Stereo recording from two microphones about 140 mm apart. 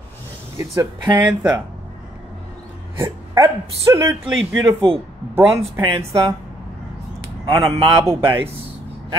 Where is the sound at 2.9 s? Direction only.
20° right (ahead or behind).